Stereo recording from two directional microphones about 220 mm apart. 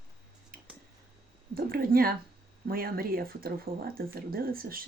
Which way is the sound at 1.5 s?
40° right (ahead or behind).